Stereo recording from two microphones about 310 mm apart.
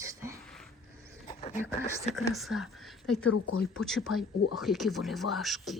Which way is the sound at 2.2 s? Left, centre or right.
Centre.